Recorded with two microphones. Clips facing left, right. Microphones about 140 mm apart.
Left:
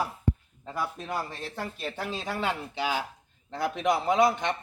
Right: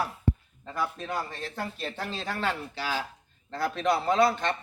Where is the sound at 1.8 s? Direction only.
10° left (ahead or behind).